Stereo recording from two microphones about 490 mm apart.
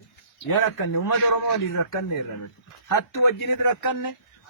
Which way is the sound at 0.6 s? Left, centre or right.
Left.